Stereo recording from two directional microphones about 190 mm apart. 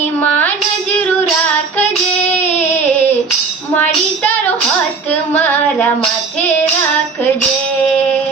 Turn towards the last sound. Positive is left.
turn(degrees=10)  # may be behind; listen again after turning